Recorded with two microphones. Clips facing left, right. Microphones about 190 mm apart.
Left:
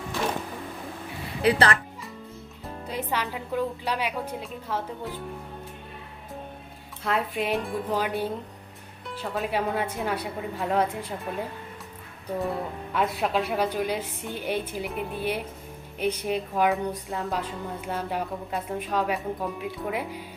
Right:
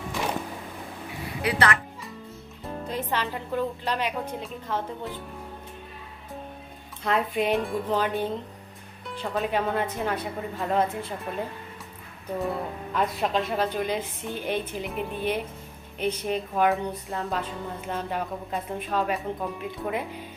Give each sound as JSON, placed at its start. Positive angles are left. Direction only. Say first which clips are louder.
{"t": 1.4, "sound": "a woman's voice", "louder": "left 3 dB", "side_deg": 30}
{"t": 2.8, "sound": "a woman's voice", "louder": "even", "side_deg": 10}
{"t": 7.0, "sound": "a woman's voice", "louder": "right 2 dB", "side_deg": 0}